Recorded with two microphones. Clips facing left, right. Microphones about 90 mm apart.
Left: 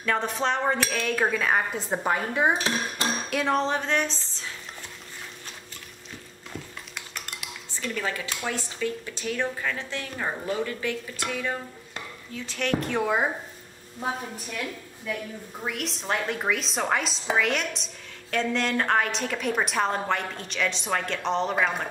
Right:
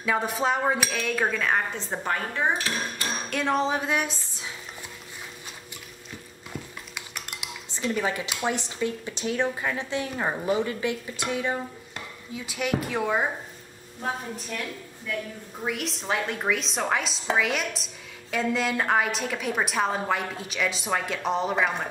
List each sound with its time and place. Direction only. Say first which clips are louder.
0.0 s a woman's voice: right 1 dB; 5° right (ahead or behind); by 2.6 s 15° left (ahead or behind)
3.3 s speech: right 1 dB; centre (ahead or behind)
7.7 s a woman's voice: right 4 dB; 20° right (ahead or behind); by 13.3 s centre (ahead or behind)
15.6 s a woman's voice: right 2 dB; centre (ahead or behind)